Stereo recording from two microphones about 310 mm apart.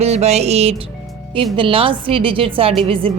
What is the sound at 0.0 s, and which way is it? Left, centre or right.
A woman's voice, right.